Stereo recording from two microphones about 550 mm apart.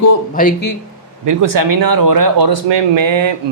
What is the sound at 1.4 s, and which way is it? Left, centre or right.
Speech, right.